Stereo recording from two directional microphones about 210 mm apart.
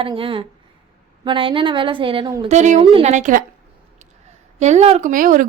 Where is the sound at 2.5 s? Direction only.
35° right (ahead or behind).